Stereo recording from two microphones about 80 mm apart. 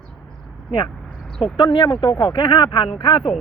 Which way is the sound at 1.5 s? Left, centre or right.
Left.